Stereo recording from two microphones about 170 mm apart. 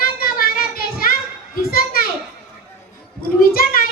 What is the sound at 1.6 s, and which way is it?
Children playing, 60° left (ahead or behind).